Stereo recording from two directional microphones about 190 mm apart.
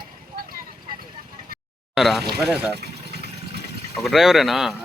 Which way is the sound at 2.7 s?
60° right (ahead or behind).